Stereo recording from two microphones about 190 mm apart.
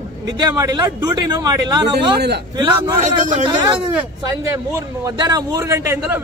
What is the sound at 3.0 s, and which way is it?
Speech, 40° right (ahead or behind).